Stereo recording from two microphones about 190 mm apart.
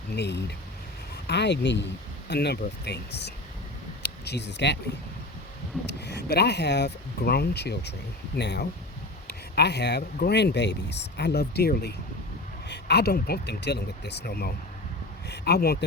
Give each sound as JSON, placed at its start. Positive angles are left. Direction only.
{"t": 0.2, "sound": "speech", "side_deg": 60}
{"t": 5.8, "sound": "speech", "side_deg": 60}